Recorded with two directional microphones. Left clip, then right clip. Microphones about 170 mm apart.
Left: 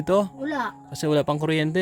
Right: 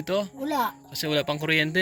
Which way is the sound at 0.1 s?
45° left (ahead or behind).